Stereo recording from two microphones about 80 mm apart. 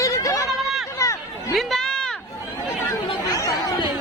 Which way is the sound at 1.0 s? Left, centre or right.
Left.